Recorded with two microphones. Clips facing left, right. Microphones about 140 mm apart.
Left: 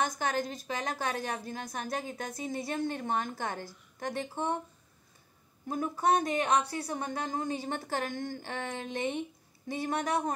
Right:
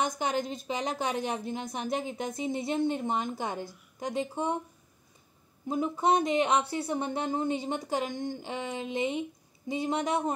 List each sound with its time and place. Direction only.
0.0 s a woman's voice: 20° right (ahead or behind)
5.7 s a woman's voice: 20° right (ahead or behind)